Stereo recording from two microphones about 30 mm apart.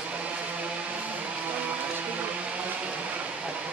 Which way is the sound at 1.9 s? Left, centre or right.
Right.